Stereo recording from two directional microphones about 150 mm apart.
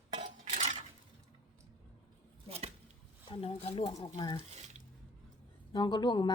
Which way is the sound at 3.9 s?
30° left (ahead or behind).